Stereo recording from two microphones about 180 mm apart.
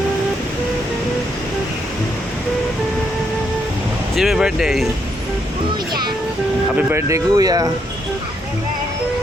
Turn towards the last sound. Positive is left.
turn(degrees=-20)  # may be behind; listen again after turning